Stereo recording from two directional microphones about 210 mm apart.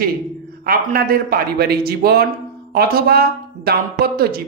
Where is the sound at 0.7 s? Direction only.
45° right (ahead or behind).